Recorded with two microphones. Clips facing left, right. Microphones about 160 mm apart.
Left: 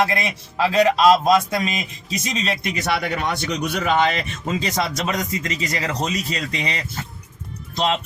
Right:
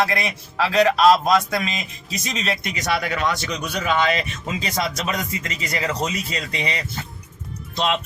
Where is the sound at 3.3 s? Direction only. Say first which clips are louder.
Left 2 dB; 55° left (ahead or behind).